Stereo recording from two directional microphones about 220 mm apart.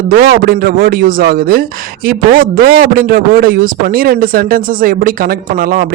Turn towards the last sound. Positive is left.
turn(degrees=-40)  # may be behind; listen again after turning